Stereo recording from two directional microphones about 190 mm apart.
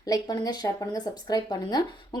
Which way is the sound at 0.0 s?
20° left (ahead or behind).